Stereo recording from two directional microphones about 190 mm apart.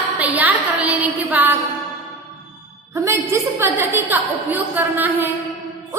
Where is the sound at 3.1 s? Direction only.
15° right (ahead or behind).